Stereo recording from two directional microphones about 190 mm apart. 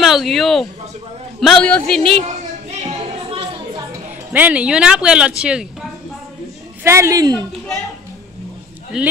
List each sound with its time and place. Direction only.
0.0 s a man's voice: centre (ahead or behind)
2.9 s music: 35° right (ahead or behind)
4.3 s a woman's voice: 10° right (ahead or behind)
8.9 s speech: 5° right (ahead or behind)